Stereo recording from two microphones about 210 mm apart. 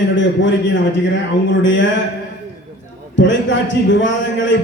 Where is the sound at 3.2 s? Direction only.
60° left (ahead or behind).